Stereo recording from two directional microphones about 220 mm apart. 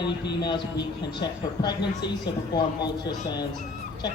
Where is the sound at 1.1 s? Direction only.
20° left (ahead or behind).